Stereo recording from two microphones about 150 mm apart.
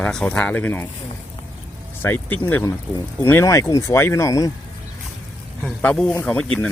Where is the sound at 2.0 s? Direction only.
10° left (ahead or behind).